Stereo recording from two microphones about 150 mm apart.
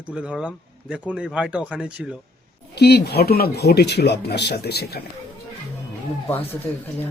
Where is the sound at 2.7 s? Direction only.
90° left.